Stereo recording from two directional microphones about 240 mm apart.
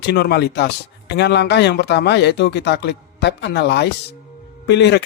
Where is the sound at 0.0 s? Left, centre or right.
Left.